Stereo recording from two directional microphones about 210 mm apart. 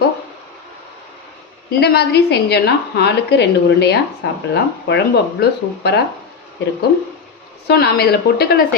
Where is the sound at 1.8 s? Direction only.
50° left (ahead or behind).